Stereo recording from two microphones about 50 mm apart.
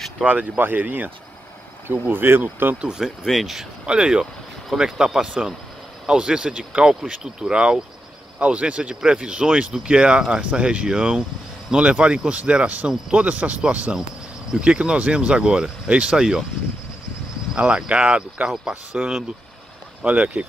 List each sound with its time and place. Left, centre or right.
0.2 s speech: right
0.6 s speech: right
3.3 s speech: centre
3.8 s speech: centre
17.6 s speech: right